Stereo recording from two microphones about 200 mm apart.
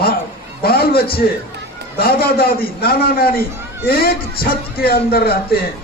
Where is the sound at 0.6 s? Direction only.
50° left (ahead or behind).